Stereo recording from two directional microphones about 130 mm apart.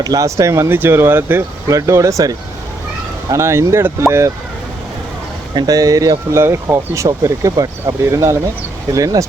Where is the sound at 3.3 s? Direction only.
20° right (ahead or behind).